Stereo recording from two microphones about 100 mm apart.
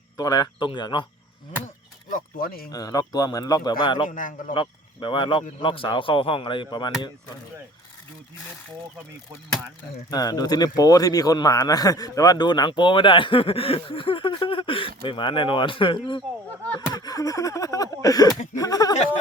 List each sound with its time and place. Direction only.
0.2 s speech: 40° left (ahead or behind)
0.6 s a man's voice: 50° left (ahead or behind)
2.6 s speech: 40° left (ahead or behind)
10.1 s a man's voice: 40° left (ahead or behind)
16.9 s speech: 40° left (ahead or behind)